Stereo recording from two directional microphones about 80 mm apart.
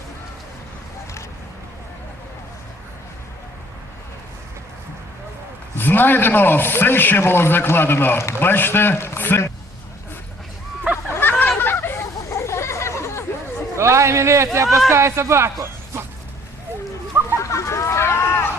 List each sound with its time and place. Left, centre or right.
5.7 s a man's voice: left
11.1 s a sound: left
13.7 s a man's voice: right
17.3 s hubbub: left